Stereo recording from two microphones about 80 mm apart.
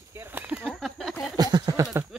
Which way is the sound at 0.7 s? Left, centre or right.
Centre.